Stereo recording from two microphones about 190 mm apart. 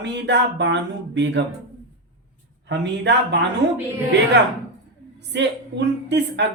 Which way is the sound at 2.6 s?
65° right (ahead or behind).